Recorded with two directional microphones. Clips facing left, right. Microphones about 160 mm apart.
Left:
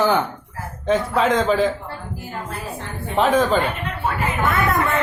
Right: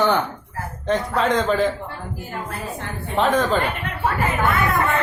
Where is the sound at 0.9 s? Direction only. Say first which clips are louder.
Left 2 dB; centre (ahead or behind).